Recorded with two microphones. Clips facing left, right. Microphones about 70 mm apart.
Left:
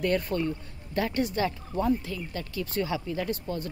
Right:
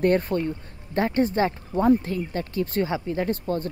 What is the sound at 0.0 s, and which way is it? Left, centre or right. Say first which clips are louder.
Speech: right 5 dB; right.